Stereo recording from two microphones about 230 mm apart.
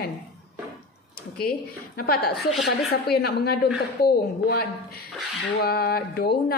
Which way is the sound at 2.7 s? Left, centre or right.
Left.